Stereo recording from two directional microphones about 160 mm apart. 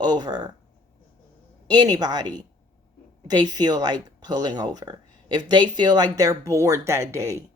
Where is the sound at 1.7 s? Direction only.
25° right (ahead or behind).